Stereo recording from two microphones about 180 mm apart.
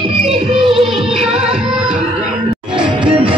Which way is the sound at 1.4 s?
5° right (ahead or behind).